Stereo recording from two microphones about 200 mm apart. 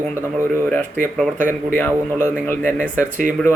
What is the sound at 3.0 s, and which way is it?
Speech, 40° right (ahead or behind).